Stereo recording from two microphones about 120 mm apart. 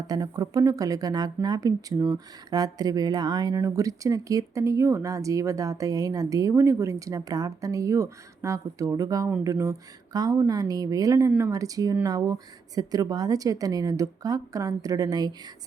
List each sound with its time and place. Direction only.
0.1 s speech: 30° right (ahead or behind)